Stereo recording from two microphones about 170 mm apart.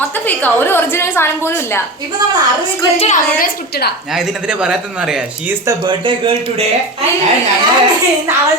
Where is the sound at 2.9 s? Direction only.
45° left (ahead or behind); by 3.9 s 65° left (ahead or behind).